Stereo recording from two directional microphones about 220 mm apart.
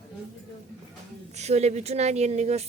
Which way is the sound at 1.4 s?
30° right (ahead or behind).